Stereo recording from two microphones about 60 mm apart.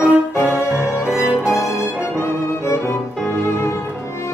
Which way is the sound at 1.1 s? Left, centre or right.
Right.